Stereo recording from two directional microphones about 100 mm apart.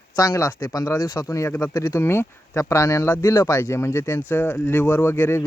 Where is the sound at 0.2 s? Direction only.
30° left (ahead or behind).